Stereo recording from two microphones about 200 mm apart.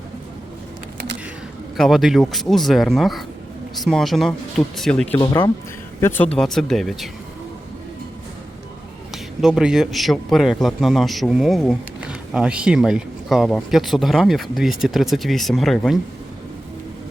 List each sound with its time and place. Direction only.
1.7 s speech: centre (ahead or behind)
5.1 s speech: 15° left (ahead or behind); by 7.1 s centre (ahead or behind)
9.1 s speech: 5° right (ahead or behind)